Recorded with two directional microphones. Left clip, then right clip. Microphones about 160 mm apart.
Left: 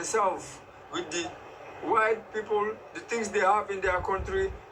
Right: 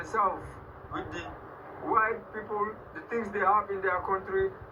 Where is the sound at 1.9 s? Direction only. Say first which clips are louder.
Left 2 dB; 30° left (ahead or behind).